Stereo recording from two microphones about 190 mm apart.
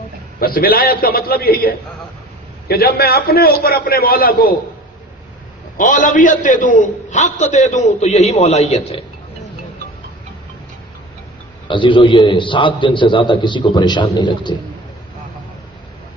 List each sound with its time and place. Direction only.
0.3 s a man's voice: 50° left (ahead or behind)
5.7 s a man's voice: 45° left (ahead or behind)
11.7 s a man's voice: 25° left (ahead or behind)